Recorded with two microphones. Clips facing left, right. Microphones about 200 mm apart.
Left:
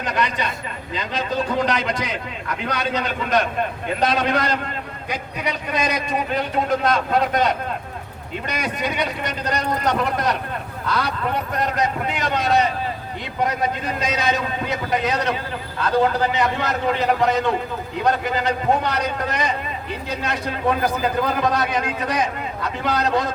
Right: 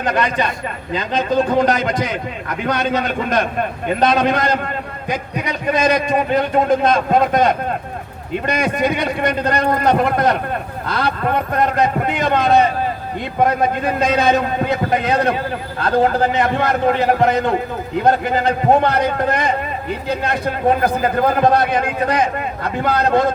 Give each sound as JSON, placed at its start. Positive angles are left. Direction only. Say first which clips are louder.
{"t": 0.0, "sound": "a man's voice", "louder": "right 5 dB", "side_deg": -50}